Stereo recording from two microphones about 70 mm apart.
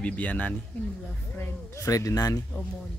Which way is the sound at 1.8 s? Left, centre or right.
Left.